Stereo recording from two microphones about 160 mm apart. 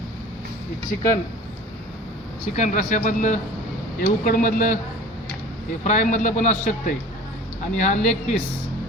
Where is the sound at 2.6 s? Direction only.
50° left (ahead or behind).